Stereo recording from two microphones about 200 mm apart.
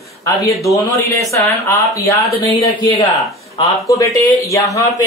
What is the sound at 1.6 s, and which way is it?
Speech, 15° left (ahead or behind).